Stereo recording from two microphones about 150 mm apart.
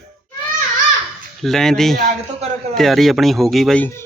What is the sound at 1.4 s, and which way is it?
Speech, 5° left (ahead or behind).